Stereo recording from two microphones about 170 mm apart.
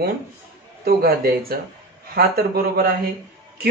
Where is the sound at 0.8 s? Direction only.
60° right (ahead or behind).